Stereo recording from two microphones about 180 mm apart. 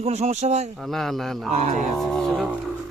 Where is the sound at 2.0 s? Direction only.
Centre (ahead or behind).